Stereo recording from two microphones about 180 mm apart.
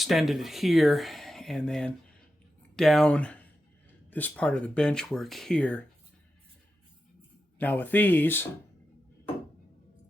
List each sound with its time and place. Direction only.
0.0 s speech: centre (ahead or behind)
7.6 s speech: 10° left (ahead or behind)